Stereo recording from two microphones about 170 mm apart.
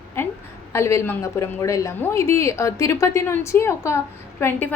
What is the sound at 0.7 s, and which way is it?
A woman's voice, 15° left (ahead or behind).